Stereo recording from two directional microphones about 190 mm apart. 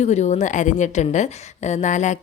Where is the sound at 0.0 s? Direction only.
35° left (ahead or behind).